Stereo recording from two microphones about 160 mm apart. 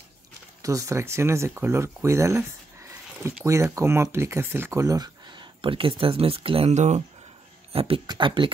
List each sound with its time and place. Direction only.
0.6 s speech: 20° right (ahead or behind); by 7.0 s 45° right (ahead or behind)
7.7 s speech: 35° right (ahead or behind)